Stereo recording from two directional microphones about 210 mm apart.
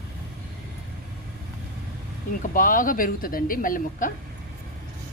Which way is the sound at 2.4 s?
40° left (ahead or behind).